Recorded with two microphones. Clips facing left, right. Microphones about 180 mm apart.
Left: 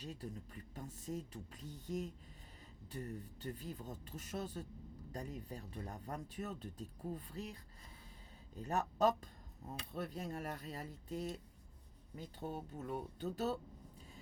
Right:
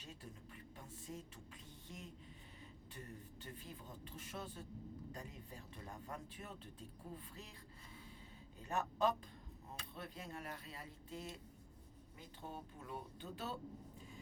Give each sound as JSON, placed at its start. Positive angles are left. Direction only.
{"t": 0.0, "sound": "speech", "side_deg": 35}
{"t": 8.6, "sound": "speech", "side_deg": 40}